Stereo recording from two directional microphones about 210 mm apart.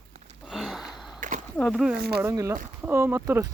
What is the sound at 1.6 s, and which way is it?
Speech, centre (ahead or behind).